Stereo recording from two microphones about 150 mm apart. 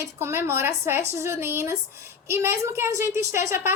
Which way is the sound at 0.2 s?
15° right (ahead or behind).